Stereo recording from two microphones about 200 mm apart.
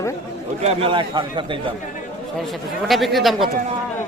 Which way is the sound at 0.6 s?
30° right (ahead or behind).